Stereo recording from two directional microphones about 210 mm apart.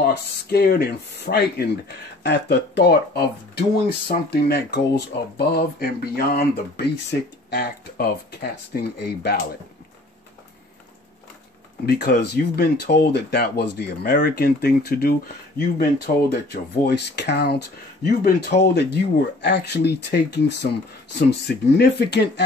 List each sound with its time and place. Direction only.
0.0 s speech: 50° left (ahead or behind)
11.8 s speech: 45° left (ahead or behind)
16.3 s speech: 50° left (ahead or behind)